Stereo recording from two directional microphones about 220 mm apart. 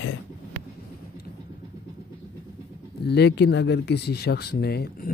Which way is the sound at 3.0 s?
50° left (ahead or behind).